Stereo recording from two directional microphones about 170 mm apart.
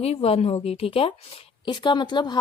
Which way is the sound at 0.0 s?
35° left (ahead or behind).